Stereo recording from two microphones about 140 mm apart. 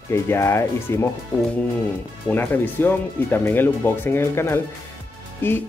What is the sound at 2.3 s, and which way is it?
Speech, 15° left (ahead or behind).